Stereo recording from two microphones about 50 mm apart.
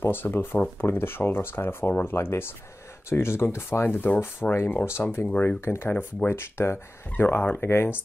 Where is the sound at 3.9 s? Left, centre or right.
Left.